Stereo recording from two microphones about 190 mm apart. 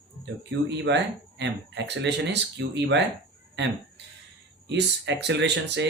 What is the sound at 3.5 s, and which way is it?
Fowl, 65° right (ahead or behind).